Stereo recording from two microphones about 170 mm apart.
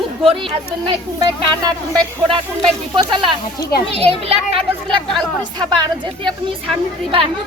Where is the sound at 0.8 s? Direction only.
20° right (ahead or behind).